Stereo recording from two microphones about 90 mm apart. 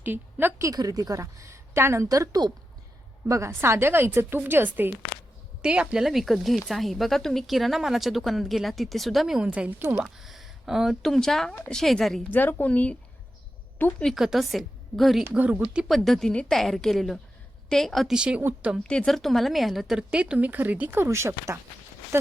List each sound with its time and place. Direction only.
0.0 s a woman's voice: 25° right (ahead or behind)
0.6 s a woman's voice: 40° right (ahead or behind)
2.0 s a woman's voice: 40° right (ahead or behind); by 10.0 s 25° right (ahead or behind)
10.0 s speech: 5° right (ahead or behind)
12.3 s a woman's voice: 20° left (ahead or behind)
14.0 s speech: centre (ahead or behind)
15.3 s speech: 15° right (ahead or behind)
15.9 s speech: 5° left (ahead or behind)
18.2 s speech: 10° right (ahead or behind)
18.8 s speech: 10° left (ahead or behind); by 21.6 s 30° right (ahead or behind)